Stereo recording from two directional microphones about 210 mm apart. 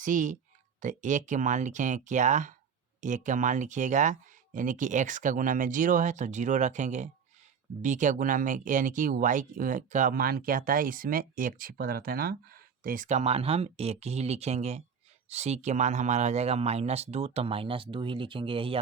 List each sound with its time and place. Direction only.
0.0 s speech: 40° right (ahead or behind)